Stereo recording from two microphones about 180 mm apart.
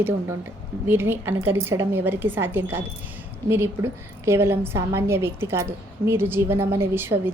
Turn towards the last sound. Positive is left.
turn(degrees=-10)  # may be behind; listen again after turning